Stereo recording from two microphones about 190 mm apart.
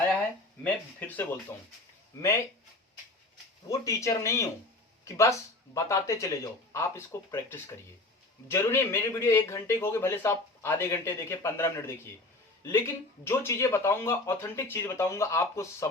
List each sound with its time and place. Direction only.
0.6 s a man's voice: 10° left (ahead or behind)
3.7 s a man's voice: 15° left (ahead or behind)
13.2 s a man's voice: 15° left (ahead or behind)